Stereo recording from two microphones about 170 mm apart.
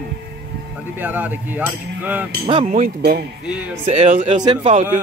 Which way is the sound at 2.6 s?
45° right (ahead or behind).